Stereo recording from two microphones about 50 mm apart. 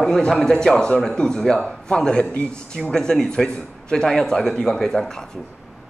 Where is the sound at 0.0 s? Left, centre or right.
Centre.